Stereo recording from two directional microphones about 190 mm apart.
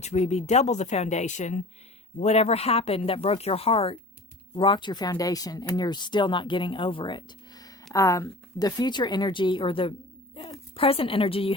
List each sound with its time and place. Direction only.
0.0 s speech: 35° left (ahead or behind)